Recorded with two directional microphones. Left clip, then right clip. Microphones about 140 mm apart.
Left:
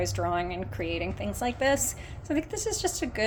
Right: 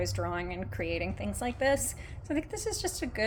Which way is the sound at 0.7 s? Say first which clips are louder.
Even; 20° right (ahead or behind).